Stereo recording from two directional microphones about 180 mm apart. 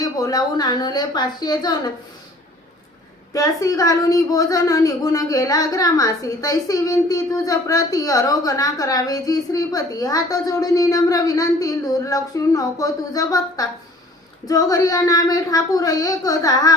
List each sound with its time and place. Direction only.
0.0 s a woman's voice: 20° left (ahead or behind)
3.3 s a woman's voice: 20° left (ahead or behind)